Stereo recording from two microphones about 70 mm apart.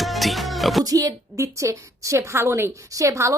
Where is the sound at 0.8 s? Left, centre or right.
Right.